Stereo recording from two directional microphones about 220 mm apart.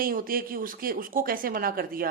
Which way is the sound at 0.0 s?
40° right (ahead or behind).